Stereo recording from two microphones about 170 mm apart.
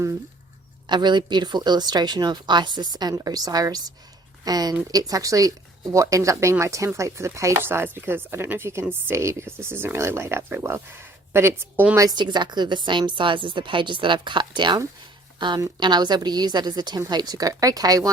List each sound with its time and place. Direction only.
0.9 s speech: 25° right (ahead or behind)